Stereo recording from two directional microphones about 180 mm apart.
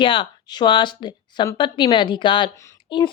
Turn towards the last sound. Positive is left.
turn(degrees=25)  # may be behind; listen again after turning